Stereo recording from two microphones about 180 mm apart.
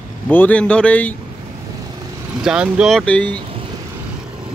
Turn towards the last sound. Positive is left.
turn(degrees=10)  # may be behind; listen again after turning